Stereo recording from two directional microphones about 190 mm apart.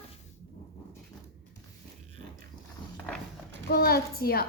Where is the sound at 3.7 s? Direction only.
55° left (ahead or behind).